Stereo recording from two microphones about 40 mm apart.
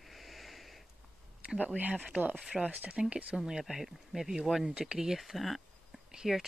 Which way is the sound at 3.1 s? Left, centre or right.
Right.